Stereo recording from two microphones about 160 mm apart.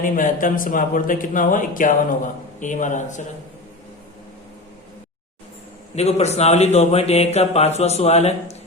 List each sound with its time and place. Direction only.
0.0 s a man's voice: 55° left (ahead or behind)
6.0 s a man's voice: 40° left (ahead or behind)